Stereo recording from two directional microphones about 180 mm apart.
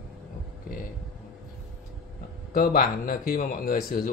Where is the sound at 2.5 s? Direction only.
55° left (ahead or behind).